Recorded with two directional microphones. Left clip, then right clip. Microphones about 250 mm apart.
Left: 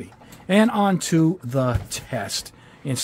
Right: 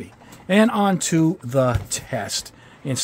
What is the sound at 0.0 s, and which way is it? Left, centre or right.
Speech, centre.